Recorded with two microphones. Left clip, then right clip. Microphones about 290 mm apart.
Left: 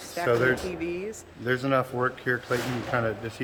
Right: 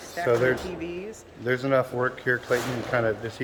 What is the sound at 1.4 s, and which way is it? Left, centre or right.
Speech, centre.